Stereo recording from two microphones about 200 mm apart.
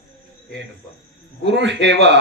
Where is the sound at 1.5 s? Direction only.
60° right (ahead or behind).